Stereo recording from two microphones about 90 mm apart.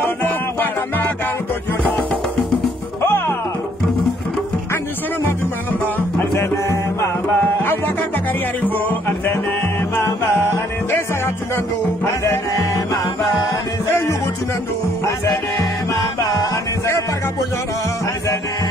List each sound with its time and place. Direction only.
3.0 s music: 30° left (ahead or behind)
6.3 s music: 30° left (ahead or behind)
12.0 s music: 40° left (ahead or behind)